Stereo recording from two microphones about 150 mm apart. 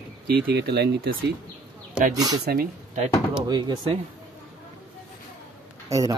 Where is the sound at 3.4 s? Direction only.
25° right (ahead or behind).